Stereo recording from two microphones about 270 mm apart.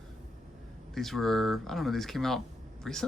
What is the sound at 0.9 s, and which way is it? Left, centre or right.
Speech, centre.